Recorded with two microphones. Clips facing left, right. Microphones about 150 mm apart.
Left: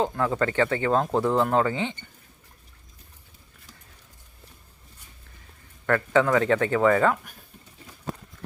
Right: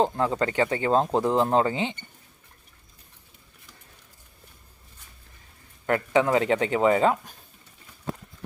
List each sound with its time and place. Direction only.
0.0 s speech: 25° right (ahead or behind)
5.8 s speech: 20° right (ahead or behind)